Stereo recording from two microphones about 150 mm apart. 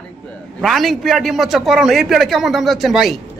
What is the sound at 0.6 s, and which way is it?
Speech, centre (ahead or behind).